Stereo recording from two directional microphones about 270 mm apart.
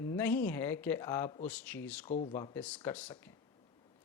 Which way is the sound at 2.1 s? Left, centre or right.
Left.